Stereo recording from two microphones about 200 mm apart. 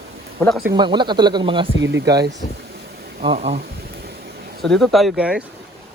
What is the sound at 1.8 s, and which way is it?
Speech, 65° right (ahead or behind).